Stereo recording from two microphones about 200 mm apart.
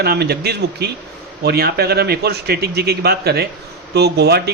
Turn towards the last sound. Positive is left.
turn(degrees=-55)  # may be behind; listen again after turning